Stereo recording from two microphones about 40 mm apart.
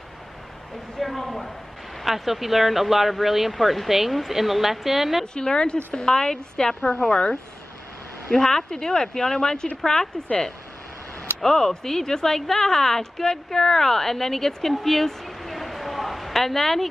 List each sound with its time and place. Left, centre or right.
0.9 s speech: centre
5.2 s a woman's voice: left
8.3 s a woman's voice: centre
11.4 s a woman's voice: centre